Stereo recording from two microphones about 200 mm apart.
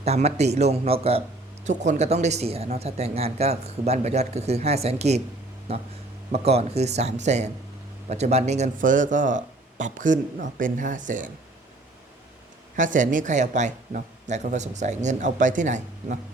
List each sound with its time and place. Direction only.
0.0 s speech: 30° right (ahead or behind)
12.7 s speech: 40° right (ahead or behind)